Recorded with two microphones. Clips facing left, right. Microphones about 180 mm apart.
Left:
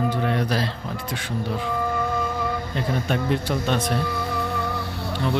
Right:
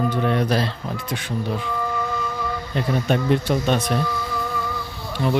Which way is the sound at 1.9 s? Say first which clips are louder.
Left 1 dB; 55° left (ahead or behind).